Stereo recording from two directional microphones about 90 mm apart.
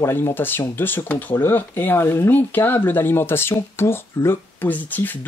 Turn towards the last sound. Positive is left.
turn(degrees=20)  # may be behind; listen again after turning